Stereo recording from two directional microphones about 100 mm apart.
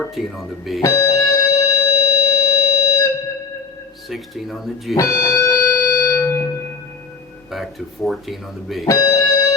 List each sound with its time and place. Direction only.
0.1 s speech: centre (ahead or behind)
0.8 s music: 30° left (ahead or behind)
4.1 s speech: centre (ahead or behind)
4.9 s music: 30° left (ahead or behind)
7.5 s speech: centre (ahead or behind)
8.9 s music: 35° left (ahead or behind)